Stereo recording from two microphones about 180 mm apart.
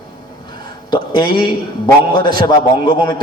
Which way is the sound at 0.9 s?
25° left (ahead or behind).